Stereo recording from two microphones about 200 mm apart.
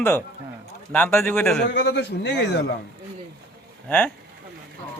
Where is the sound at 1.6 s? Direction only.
60° left (ahead or behind).